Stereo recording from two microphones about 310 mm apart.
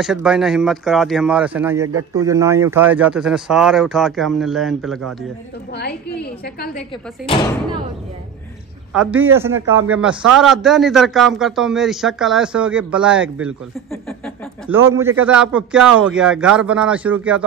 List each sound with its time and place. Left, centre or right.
0.0 s a man's voice: centre
6.4 s a woman's voice: left
8.9 s a man's voice: centre